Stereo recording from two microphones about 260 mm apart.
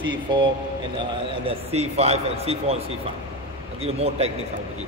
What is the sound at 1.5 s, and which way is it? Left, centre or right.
A man's voice, right.